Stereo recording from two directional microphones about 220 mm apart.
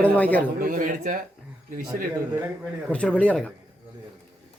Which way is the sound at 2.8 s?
5° left (ahead or behind).